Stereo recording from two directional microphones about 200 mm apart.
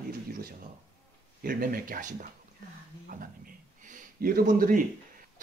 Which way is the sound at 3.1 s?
45° right (ahead or behind).